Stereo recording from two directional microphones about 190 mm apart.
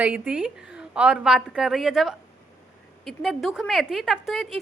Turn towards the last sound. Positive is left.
turn(degrees=0)  # may be behind; listen again after turning